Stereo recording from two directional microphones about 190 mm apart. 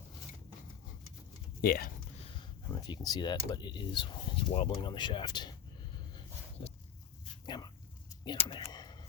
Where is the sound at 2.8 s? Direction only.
20° left (ahead or behind).